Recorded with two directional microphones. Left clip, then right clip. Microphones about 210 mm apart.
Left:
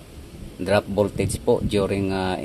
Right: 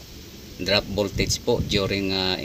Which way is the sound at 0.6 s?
5° left (ahead or behind).